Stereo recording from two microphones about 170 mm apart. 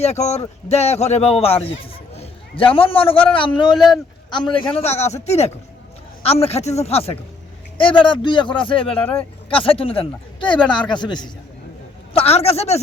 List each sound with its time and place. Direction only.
0.0 s a man's voice: 40° left (ahead or behind)
12.1 s speech: 35° left (ahead or behind)